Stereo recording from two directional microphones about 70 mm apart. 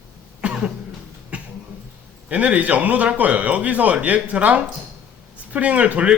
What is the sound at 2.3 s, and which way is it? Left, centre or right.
Speech, centre.